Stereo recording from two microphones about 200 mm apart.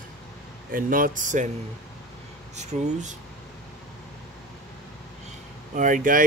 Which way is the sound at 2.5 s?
35° right (ahead or behind).